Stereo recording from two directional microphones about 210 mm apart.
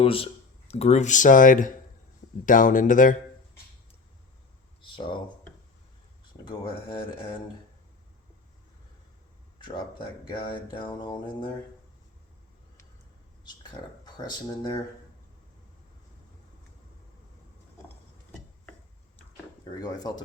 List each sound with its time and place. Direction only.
0.0 s speech: 25° left (ahead or behind)
4.9 s speech: 25° left (ahead or behind)
6.4 s speech: 20° left (ahead or behind)
9.6 s speech: 20° left (ahead or behind)
13.4 s speech: 20° left (ahead or behind)
17.8 s a sound: 5° left (ahead or behind)
19.8 s speech: 20° left (ahead or behind)